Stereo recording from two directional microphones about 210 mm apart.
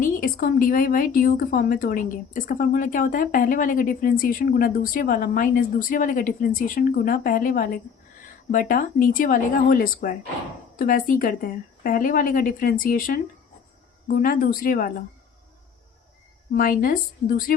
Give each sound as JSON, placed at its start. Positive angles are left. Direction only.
{"t": 0.0, "sound": "a woman's voice", "side_deg": 40}
{"t": 16.5, "sound": "a woman's voice", "side_deg": 45}